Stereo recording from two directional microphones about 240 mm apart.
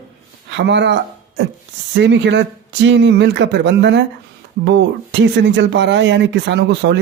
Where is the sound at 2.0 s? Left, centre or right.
Right.